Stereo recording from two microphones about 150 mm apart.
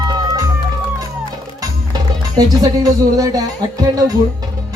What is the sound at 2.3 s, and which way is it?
Music, 25° right (ahead or behind).